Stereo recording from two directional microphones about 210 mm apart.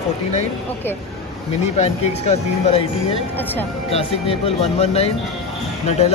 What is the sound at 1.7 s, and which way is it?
Speech, 30° left (ahead or behind).